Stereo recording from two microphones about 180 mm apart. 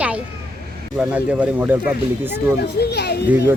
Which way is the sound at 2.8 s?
65° left (ahead or behind).